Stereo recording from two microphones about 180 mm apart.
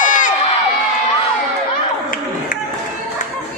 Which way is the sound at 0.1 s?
45° left (ahead or behind).